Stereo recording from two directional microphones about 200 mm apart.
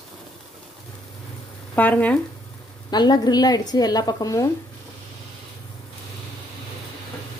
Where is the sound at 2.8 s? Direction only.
20° left (ahead or behind).